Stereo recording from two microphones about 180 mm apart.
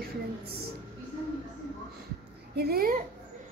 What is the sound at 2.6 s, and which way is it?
Speech, 60° right (ahead or behind).